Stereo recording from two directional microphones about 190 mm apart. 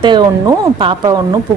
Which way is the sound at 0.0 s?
25° right (ahead or behind).